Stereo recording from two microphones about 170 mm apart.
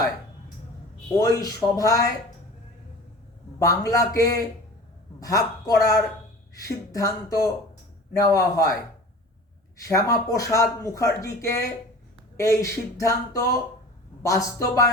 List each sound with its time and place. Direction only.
1.3 s speech: 20° left (ahead or behind)
3.6 s speech: 20° left (ahead or behind)